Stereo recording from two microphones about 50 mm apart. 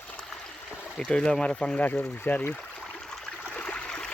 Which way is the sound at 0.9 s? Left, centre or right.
Centre.